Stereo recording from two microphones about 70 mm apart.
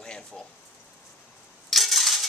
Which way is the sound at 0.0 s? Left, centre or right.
Centre.